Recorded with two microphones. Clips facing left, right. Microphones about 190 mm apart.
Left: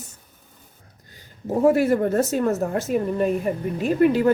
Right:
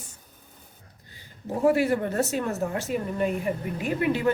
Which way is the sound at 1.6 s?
45° left (ahead or behind).